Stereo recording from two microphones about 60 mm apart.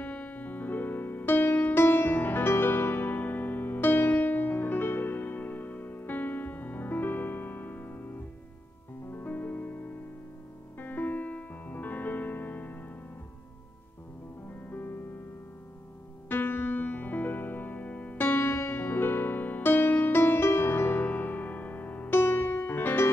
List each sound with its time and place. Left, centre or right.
0.0 s music: left
14.5 s music: left
16.3 s music: left
18.2 s music: left
22.1 s music: left